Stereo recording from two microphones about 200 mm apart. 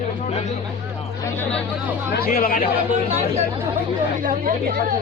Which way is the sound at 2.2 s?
45° left (ahead or behind).